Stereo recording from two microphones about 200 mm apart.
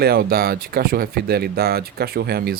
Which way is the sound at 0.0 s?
50° right (ahead or behind).